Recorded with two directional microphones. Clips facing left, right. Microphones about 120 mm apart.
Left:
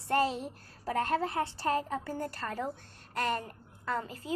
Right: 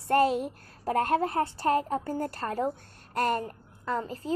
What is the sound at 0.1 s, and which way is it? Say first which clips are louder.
A woman's voice: right 6 dB; 50° right (ahead or behind).